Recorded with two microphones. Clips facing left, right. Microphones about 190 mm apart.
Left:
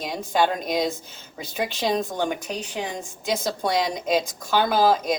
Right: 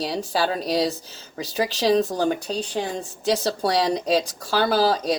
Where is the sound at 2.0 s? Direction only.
35° right (ahead or behind).